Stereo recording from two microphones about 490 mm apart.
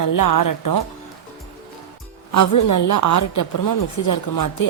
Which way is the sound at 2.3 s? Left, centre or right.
Left.